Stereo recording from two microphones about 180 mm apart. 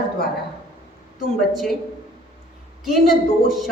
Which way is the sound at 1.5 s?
Centre (ahead or behind).